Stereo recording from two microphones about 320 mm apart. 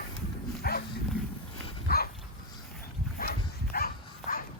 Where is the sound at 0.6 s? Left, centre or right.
Left.